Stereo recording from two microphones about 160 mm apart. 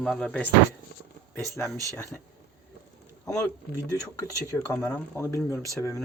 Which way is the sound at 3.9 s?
20° left (ahead or behind).